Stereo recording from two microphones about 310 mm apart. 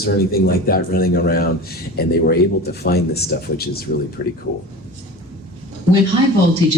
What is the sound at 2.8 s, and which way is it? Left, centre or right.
Speech, left.